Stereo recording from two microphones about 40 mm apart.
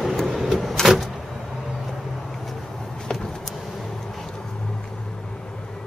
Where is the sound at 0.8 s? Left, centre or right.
Centre.